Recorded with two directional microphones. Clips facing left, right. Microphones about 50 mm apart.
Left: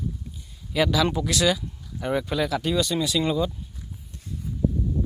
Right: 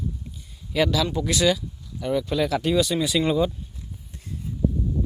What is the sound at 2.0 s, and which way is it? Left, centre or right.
Speech, centre.